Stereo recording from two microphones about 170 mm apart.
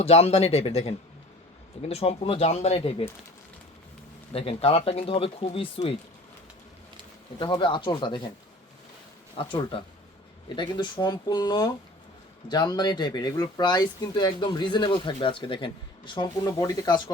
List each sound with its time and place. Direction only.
0.0 s speech: 35° left (ahead or behind)
4.3 s speech: 35° left (ahead or behind)
7.3 s speech: 25° left (ahead or behind)
9.3 s speech: 30° left (ahead or behind)